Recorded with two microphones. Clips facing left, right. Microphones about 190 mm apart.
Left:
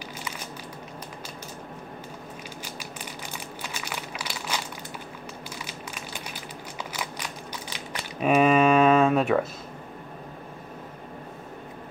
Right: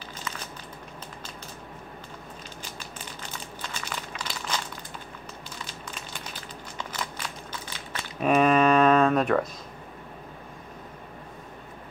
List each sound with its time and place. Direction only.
3.3 s crumpling: 10° left (ahead or behind)
5.7 s crumpling: 10° left (ahead or behind)
8.2 s a sound: 5° left (ahead or behind)